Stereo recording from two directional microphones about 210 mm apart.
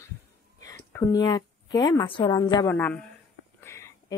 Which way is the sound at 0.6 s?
15° left (ahead or behind).